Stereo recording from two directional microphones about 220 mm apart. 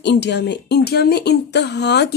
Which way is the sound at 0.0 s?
50° left (ahead or behind).